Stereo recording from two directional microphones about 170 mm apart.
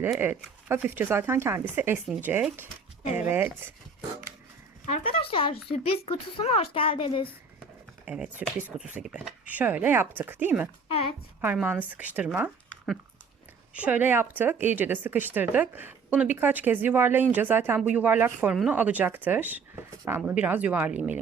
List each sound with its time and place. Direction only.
0.0 s speech: 10° right (ahead or behind)
4.9 s a woman's voice: 35° left (ahead or behind)
8.0 s speech: 5° right (ahead or behind)